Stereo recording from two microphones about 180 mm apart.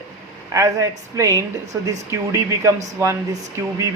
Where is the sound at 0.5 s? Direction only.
15° right (ahead or behind).